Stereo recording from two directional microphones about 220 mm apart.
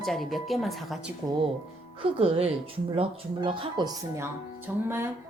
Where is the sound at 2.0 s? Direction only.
25° right (ahead or behind).